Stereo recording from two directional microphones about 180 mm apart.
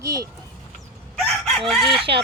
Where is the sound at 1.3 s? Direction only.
Centre (ahead or behind).